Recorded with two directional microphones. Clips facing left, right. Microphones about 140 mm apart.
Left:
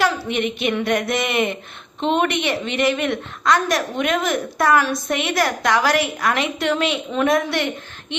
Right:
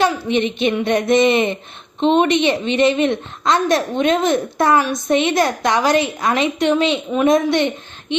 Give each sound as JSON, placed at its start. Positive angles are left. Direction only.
{"t": 0.0, "sound": "a woman's voice", "side_deg": -25}